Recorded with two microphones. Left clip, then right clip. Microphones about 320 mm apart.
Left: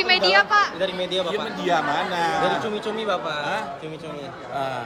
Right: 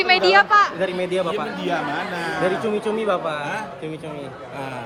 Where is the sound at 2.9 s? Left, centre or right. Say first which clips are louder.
Right 4 dB; centre.